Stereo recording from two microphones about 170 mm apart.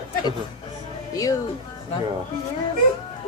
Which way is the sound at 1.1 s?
20° left (ahead or behind).